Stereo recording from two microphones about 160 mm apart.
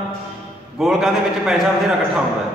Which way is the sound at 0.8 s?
Centre (ahead or behind).